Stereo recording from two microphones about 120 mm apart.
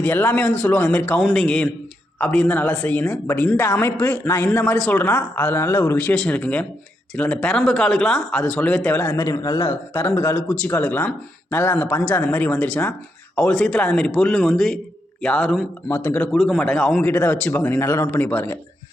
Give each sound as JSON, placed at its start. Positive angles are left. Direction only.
{"t": 0.0, "sound": "a woman's voice", "side_deg": 15}
{"t": 9.1, "sound": "speech", "side_deg": 30}
{"t": 9.6, "sound": "a woman's voice", "side_deg": 20}
{"t": 15.9, "sound": "a woman's voice", "side_deg": 20}
{"t": 17.0, "sound": "a woman's voice", "side_deg": 20}